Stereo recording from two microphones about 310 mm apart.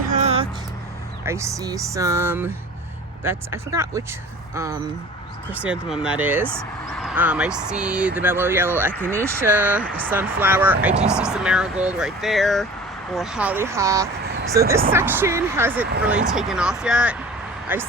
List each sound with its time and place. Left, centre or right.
0.1 s vehicle: right
1.2 s speech: centre
8.9 s speech: centre
9.2 s speech: centre